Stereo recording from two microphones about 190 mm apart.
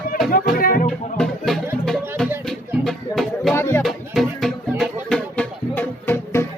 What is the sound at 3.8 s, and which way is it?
Music, centre (ahead or behind).